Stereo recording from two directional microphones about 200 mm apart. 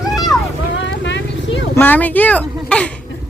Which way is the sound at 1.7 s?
10° left (ahead or behind).